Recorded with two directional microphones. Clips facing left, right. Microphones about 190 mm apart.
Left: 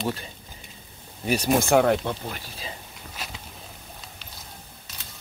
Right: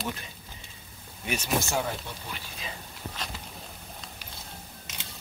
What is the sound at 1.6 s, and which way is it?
Speech, 65° left (ahead or behind).